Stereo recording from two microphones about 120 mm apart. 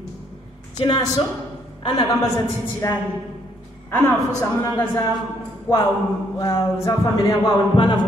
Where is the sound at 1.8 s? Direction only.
40° left (ahead or behind).